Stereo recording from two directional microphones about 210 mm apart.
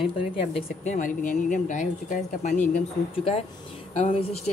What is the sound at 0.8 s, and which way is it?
A woman's voice, 35° left (ahead or behind).